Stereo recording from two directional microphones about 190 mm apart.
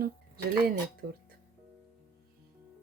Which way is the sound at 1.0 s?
50° right (ahead or behind).